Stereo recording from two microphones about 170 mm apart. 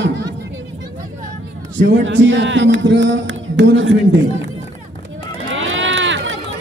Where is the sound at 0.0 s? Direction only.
90° right.